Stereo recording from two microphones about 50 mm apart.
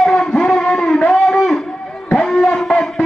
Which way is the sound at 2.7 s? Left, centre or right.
Left.